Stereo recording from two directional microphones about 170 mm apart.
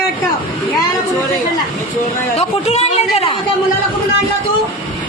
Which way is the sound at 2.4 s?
40° left (ahead or behind).